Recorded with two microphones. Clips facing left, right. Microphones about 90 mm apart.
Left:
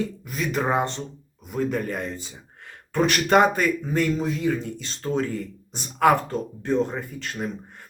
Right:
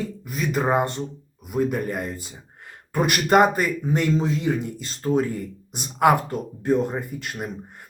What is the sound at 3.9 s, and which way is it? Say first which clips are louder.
Speech: right 1 dB; 20° right (ahead or behind).